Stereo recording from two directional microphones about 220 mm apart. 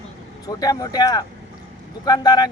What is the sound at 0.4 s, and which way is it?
Speech, 15° left (ahead or behind).